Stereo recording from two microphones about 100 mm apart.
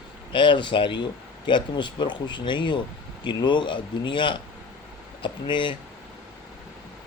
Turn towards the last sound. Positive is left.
turn(degrees=55)  # may be behind; listen again after turning